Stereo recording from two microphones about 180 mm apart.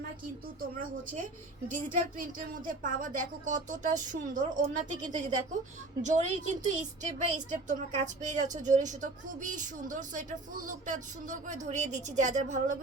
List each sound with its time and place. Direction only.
1.6 s a woman's voice: 45° right (ahead or behind)